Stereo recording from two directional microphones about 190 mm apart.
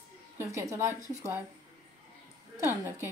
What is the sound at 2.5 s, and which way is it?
Speech, 15° right (ahead or behind).